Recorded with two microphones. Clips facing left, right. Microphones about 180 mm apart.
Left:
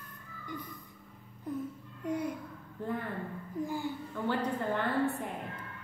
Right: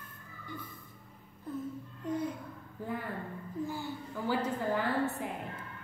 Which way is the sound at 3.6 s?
15° left (ahead or behind).